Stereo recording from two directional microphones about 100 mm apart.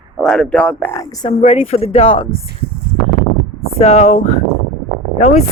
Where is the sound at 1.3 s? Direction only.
75° left (ahead or behind).